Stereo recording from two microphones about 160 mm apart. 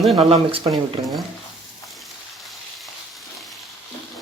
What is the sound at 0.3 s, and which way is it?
Speech, 40° right (ahead or behind).